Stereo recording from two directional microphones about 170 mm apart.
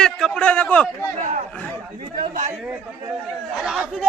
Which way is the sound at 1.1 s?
45° right (ahead or behind).